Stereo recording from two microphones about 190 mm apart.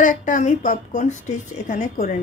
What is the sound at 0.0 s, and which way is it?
Speech, 40° left (ahead or behind).